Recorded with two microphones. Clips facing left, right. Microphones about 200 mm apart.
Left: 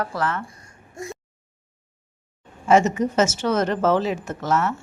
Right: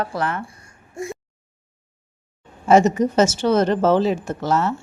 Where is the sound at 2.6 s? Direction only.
35° right (ahead or behind).